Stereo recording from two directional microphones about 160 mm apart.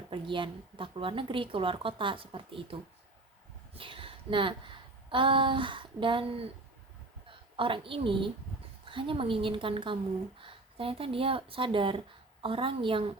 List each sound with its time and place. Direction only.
0.1 s speech: 30° right (ahead or behind)
3.8 s a woman's voice: 35° right (ahead or behind)